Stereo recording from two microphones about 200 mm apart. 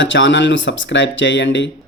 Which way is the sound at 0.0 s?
65° left (ahead or behind).